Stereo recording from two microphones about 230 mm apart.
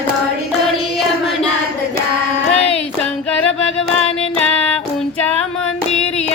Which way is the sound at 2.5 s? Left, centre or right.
Left.